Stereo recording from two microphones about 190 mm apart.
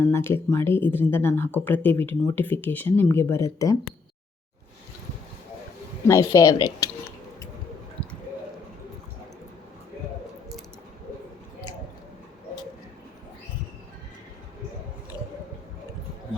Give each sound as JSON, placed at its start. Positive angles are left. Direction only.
{"t": 0.1, "sound": "speech", "side_deg": 10}
{"t": 6.1, "sound": "speech", "side_deg": 15}